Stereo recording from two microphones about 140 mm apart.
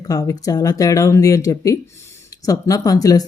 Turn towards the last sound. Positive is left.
turn(degrees=25)  # may be behind; listen again after turning